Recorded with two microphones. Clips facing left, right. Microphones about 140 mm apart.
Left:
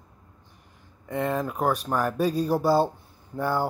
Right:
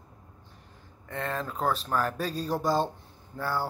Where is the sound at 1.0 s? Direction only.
15° left (ahead or behind).